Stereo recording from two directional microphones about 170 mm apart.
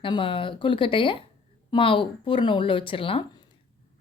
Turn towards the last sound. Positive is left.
turn(degrees=30)  # may be behind; listen again after turning